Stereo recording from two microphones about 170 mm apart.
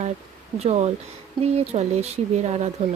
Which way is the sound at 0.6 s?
40° right (ahead or behind).